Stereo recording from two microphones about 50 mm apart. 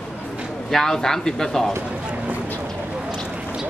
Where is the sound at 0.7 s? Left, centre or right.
Centre.